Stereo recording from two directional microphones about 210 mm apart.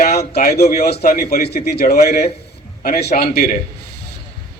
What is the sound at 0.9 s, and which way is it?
A man's voice, 45° left (ahead or behind).